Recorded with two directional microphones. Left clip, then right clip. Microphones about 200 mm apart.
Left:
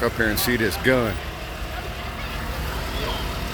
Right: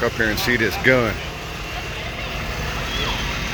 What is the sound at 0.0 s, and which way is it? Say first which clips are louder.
Speech: right 2 dB; 20° left (ahead or behind).